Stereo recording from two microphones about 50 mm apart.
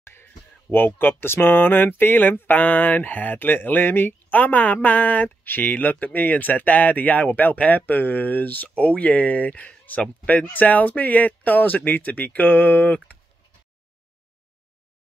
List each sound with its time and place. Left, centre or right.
0.0 s speech: left
8.6 s speech: left